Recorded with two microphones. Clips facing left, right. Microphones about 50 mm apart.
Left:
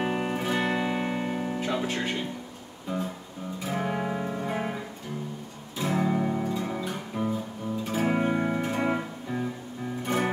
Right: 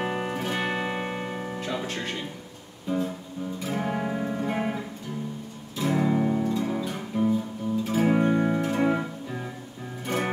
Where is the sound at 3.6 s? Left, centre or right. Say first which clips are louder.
Even; centre.